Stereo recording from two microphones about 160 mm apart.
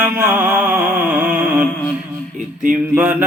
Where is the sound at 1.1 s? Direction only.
10° right (ahead or behind).